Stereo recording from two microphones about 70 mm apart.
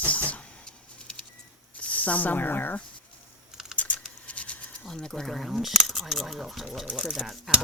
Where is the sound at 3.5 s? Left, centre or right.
Centre.